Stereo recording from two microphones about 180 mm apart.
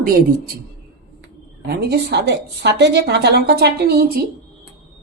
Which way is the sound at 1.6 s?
65° right (ahead or behind).